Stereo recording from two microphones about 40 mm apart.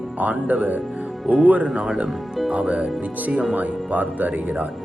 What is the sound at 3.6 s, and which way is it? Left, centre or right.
Speech, right.